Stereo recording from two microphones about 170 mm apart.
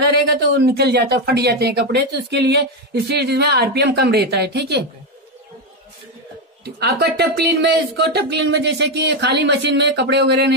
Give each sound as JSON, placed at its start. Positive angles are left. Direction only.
{"t": 0.0, "sound": "speech", "side_deg": -75}
{"t": 6.6, "sound": "speech", "side_deg": -70}